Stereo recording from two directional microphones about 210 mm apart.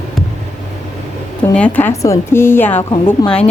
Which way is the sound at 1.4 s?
5° left (ahead or behind).